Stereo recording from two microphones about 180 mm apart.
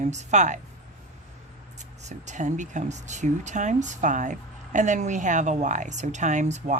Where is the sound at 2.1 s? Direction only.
40° right (ahead or behind).